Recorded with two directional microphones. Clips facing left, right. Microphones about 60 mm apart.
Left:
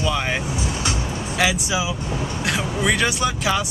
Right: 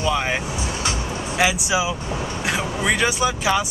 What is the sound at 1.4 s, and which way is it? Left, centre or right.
Speech, centre.